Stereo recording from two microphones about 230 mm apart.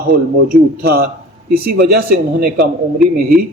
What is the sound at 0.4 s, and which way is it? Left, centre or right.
Speech, right.